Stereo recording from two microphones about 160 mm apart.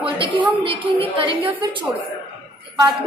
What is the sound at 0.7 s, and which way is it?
Speech, 35° right (ahead or behind).